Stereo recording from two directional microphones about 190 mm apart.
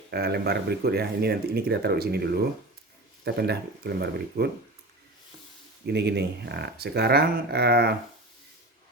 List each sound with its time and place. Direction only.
0.1 s speech: 60° right (ahead or behind)
5.8 s speech: 60° right (ahead or behind)